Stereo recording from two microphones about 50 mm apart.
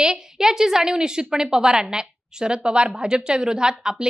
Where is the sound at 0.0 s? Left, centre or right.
Centre.